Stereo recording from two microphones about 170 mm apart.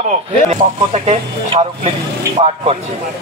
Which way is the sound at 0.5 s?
40° right (ahead or behind).